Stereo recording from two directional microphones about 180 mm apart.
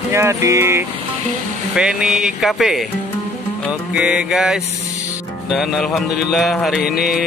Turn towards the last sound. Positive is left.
turn(degrees=60)  # may be behind; listen again after turning